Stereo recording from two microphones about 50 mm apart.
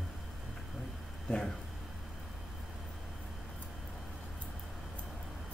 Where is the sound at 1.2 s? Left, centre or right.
Centre.